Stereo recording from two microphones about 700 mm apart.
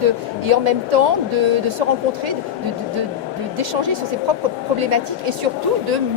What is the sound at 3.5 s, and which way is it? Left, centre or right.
Speech, right.